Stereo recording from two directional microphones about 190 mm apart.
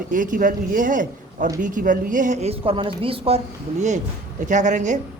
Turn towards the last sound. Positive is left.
turn(degrees=-40)  # may be behind; listen again after turning